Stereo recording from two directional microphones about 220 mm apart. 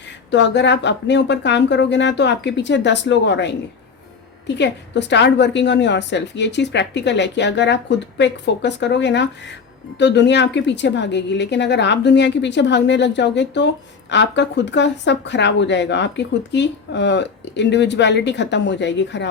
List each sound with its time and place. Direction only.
0.3 s speech: 55° left (ahead or behind)